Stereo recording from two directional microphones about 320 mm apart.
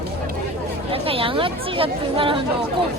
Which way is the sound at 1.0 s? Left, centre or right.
Centre.